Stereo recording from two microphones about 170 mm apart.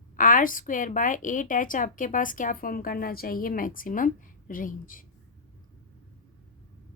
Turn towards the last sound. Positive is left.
turn(degrees=55)  # may be behind; listen again after turning